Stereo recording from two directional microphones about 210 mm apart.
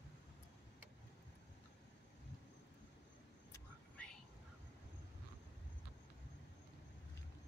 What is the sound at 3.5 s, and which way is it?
Whispering, 5° left (ahead or behind).